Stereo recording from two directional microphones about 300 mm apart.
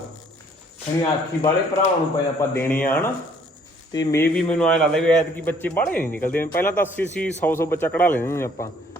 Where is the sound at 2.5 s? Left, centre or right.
Centre.